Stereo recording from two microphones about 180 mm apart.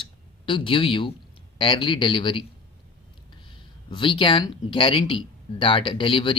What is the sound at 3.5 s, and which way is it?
Speech, 25° left (ahead or behind).